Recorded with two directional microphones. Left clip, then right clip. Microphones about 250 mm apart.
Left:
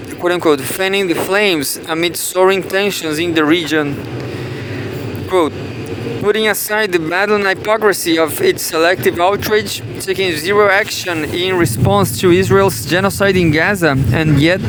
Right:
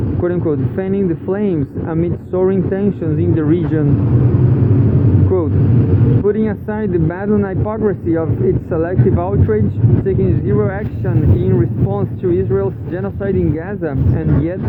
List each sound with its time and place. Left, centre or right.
0.3 s speech: left
6.2 s speech: left